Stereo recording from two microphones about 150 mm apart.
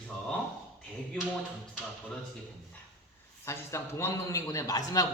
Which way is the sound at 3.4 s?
20° left (ahead or behind).